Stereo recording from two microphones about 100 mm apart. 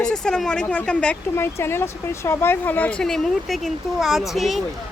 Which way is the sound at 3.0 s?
5° left (ahead or behind).